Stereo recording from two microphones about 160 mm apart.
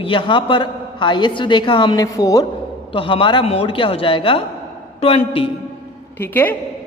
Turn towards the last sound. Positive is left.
turn(degrees=10)  # may be behind; listen again after turning